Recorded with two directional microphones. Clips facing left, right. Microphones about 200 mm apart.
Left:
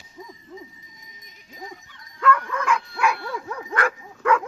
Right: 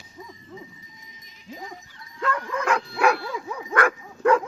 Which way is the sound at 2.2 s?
25° right (ahead or behind).